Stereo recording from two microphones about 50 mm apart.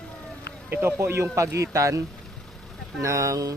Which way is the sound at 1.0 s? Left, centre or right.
Right.